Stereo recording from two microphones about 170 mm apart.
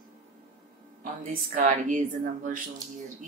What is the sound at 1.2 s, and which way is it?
Speech, 50° right (ahead or behind).